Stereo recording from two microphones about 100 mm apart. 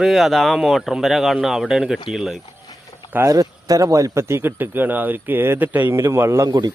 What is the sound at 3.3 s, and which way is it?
Speech, 35° right (ahead or behind).